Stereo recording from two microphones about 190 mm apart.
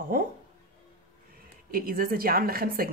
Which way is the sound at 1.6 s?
50° right (ahead or behind).